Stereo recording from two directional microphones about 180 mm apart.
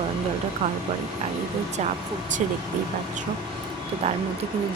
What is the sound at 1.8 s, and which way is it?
Speech, 40° right (ahead or behind).